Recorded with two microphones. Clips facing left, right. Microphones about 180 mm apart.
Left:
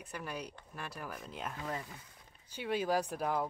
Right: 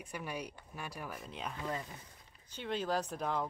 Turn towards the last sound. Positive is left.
turn(degrees=10)  # may be behind; listen again after turning